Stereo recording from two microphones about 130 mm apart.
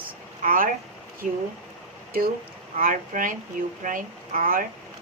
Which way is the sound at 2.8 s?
90° right.